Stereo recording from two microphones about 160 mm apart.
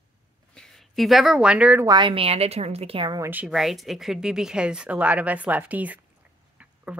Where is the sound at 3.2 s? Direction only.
10° right (ahead or behind).